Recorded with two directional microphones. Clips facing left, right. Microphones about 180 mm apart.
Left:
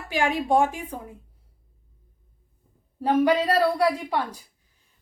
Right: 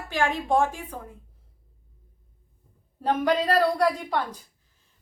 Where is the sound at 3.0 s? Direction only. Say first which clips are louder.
Left 3 dB; 10° left (ahead or behind).